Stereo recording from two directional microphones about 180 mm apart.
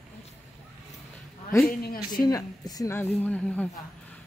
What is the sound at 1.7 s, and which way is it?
Speech, 55° left (ahead or behind).